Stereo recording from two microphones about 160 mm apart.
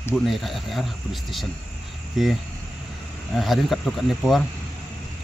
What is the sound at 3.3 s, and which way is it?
Speech, centre (ahead or behind).